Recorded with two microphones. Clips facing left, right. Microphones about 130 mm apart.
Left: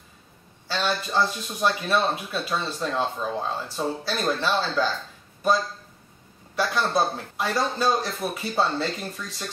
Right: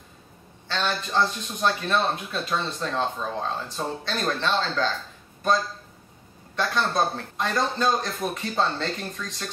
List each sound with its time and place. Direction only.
0.7 s speech: 5° left (ahead or behind)
6.5 s speech: 5° left (ahead or behind)